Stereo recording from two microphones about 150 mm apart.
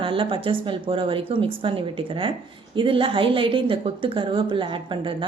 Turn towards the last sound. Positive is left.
turn(degrees=-35)  # may be behind; listen again after turning